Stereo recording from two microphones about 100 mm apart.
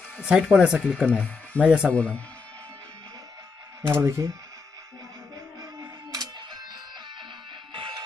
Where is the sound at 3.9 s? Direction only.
30° right (ahead or behind).